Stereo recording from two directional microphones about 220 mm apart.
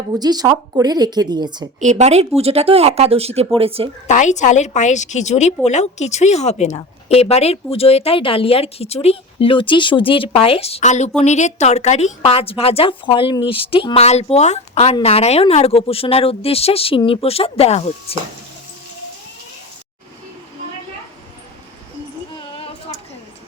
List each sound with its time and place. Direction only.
0.1 s speech: 20° right (ahead or behind)
1.8 s speech: 30° right (ahead or behind)
4.0 s a woman's voice: 35° left (ahead or behind)
22.5 s a sound: 25° left (ahead or behind)